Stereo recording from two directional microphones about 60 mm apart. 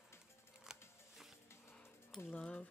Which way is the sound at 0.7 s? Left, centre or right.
Centre.